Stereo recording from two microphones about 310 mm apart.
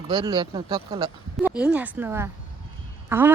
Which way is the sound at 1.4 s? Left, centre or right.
Centre.